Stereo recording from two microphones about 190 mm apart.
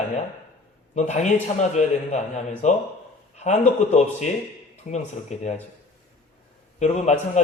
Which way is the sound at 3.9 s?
35° left (ahead or behind).